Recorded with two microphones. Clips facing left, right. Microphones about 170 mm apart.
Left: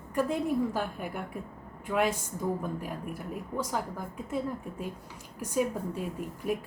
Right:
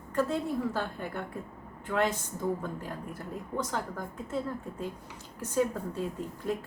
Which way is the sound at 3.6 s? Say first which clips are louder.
Left 1 dB; 10° left (ahead or behind).